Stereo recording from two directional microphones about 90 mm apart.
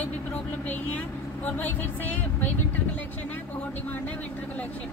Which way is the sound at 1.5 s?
20° left (ahead or behind).